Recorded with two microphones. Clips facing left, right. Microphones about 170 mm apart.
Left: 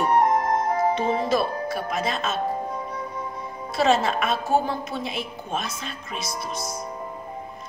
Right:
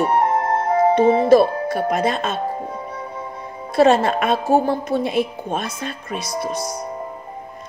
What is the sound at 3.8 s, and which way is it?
A woman's voice, 55° right (ahead or behind).